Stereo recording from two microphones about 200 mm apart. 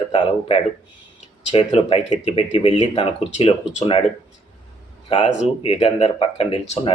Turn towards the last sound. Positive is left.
turn(degrees=30)  # may be behind; listen again after turning